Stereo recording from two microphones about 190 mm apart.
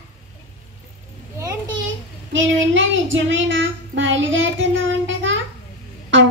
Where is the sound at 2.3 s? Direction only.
80° right.